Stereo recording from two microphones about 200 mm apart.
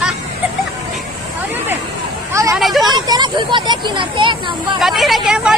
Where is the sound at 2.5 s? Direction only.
Centre (ahead or behind).